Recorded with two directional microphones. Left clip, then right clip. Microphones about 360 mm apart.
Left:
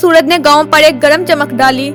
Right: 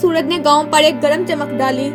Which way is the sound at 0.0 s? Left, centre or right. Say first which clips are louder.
Left 8 dB; left.